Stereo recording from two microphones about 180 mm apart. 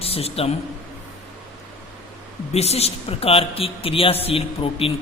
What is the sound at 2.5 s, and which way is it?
Speech, 35° left (ahead or behind).